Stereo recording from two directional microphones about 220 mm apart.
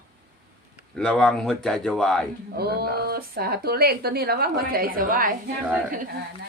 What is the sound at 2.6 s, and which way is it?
Speech, 45° right (ahead or behind).